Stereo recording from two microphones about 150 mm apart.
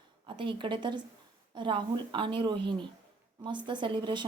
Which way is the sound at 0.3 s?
35° right (ahead or behind).